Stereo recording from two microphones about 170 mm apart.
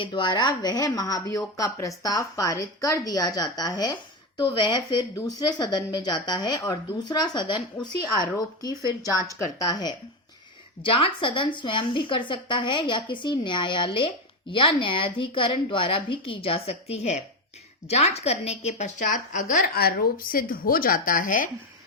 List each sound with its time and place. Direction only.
0.0 s a woman's voice: 25° left (ahead or behind); by 21.5 s 55° left (ahead or behind)